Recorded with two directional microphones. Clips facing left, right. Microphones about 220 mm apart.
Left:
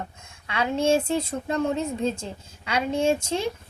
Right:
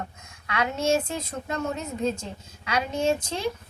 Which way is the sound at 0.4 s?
30° left (ahead or behind).